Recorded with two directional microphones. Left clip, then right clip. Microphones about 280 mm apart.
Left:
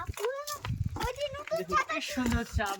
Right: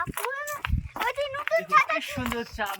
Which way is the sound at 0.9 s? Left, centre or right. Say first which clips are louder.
Right 6 dB; centre.